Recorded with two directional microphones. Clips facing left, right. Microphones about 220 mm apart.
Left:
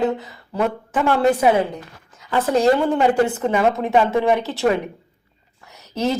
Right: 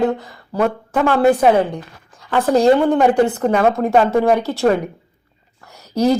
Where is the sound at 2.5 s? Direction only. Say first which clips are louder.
Right 4 dB; 35° right (ahead or behind).